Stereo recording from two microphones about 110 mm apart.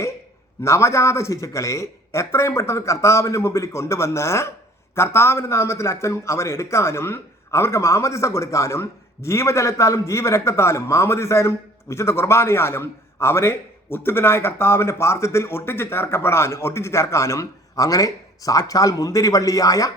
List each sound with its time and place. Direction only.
0.6 s a man's voice: 25° left (ahead or behind)